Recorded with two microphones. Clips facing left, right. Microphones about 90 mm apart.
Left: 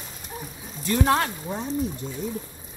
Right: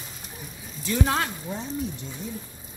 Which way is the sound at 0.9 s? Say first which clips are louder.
Left 3 dB; 60° left (ahead or behind).